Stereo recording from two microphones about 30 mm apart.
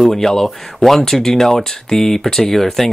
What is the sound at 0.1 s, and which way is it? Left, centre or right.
Speech, centre.